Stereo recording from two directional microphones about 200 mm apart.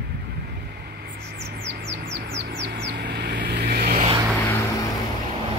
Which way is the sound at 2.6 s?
55° right (ahead or behind).